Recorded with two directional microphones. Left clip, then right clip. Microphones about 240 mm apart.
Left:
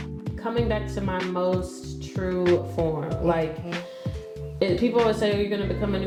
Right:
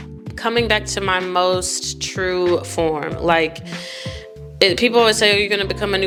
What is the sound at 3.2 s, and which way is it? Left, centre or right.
Speech, centre.